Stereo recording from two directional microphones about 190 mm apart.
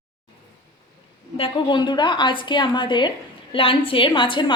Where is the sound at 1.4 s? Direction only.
25° left (ahead or behind).